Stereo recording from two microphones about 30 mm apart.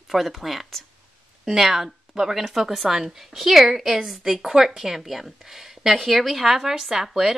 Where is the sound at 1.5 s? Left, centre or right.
Centre.